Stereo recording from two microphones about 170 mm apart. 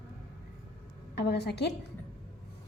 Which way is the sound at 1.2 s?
75° left (ahead or behind).